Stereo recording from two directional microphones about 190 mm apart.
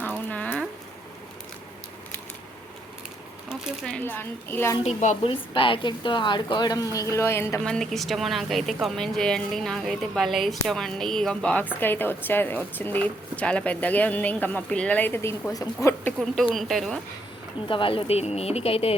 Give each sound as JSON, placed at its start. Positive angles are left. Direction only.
{"t": 0.3, "sound": "a sound", "side_deg": 10}
{"t": 3.5, "sound": "a woman's voice", "side_deg": -5}
{"t": 4.8, "sound": "a woman's voice", "side_deg": 35}
{"t": 7.6, "sound": "a woman's voice", "side_deg": 5}
{"t": 16.2, "sound": "a woman's voice", "side_deg": 0}
{"t": 17.7, "sound": "speech", "side_deg": 25}